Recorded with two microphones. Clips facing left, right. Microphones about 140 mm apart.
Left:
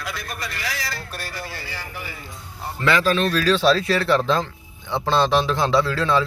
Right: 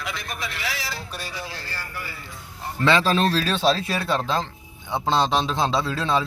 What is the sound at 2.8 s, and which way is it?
Speech, 30° right (ahead or behind).